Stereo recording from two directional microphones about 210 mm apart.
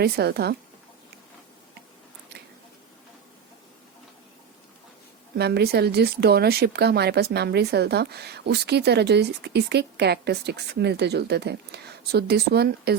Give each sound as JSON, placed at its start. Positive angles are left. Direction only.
{"t": 0.0, "sound": "speech", "side_deg": -50}
{"t": 5.4, "sound": "speech", "side_deg": -50}